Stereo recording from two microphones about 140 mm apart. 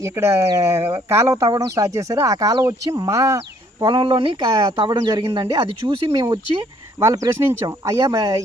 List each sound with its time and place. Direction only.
0.0 s speech: 20° right (ahead or behind)
4.0 s speech: 35° right (ahead or behind)